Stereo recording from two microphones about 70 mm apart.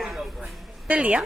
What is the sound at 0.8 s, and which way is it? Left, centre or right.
Speech, centre.